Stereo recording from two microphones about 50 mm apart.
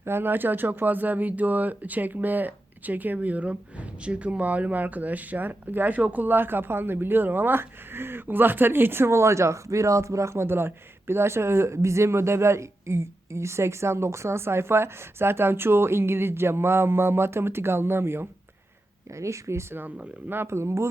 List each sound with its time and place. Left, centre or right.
0.0 s speech: right
10.4 s speech: right
19.1 s speech: right
19.7 s speech: right
20.5 s speech: right